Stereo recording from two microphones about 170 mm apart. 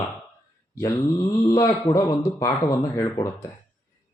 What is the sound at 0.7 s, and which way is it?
Speech, 20° left (ahead or behind).